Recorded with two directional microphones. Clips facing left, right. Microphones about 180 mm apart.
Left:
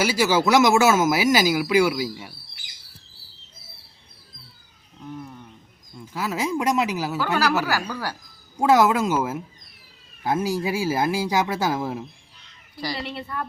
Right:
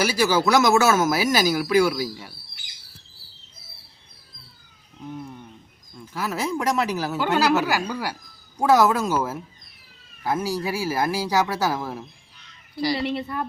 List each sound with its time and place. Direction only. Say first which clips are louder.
0.0 s speech: even; 10° left (ahead or behind)
6.1 s speech: left 1 dB; 15° left (ahead or behind)
7.2 s speech: right 3 dB; 20° right (ahead or behind)
8.7 s speech: even; 15° left (ahead or behind)
12.8 s speech: right 6 dB; 10° right (ahead or behind)